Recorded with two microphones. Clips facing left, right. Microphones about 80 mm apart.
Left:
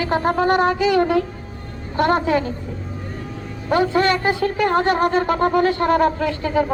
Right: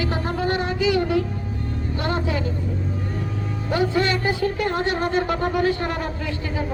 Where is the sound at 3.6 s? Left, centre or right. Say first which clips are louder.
Left 4 dB; left.